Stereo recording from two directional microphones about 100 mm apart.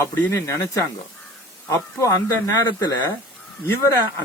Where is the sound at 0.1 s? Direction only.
30° left (ahead or behind).